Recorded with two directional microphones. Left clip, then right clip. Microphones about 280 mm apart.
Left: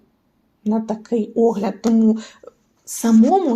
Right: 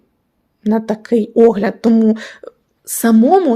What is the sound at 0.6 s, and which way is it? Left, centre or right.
Speech, right.